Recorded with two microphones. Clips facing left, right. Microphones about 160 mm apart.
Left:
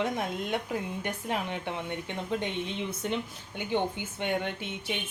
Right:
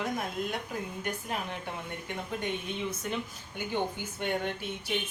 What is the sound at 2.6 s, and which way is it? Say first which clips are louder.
Speech: left 1 dB; 25° left (ahead or behind).